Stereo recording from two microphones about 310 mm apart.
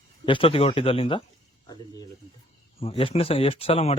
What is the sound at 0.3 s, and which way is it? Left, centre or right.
Speech, centre.